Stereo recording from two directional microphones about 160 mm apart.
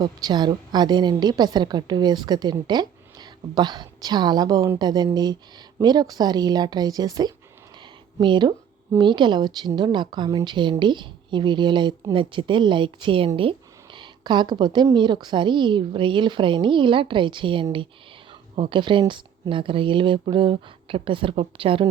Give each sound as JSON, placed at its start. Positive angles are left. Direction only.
{"t": 0.0, "sound": "a woman's voice", "side_deg": -25}